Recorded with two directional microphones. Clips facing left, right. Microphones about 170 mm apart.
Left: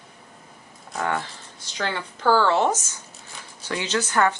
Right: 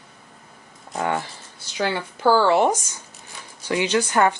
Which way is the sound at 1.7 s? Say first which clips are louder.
Right 4 dB; 10° right (ahead or behind).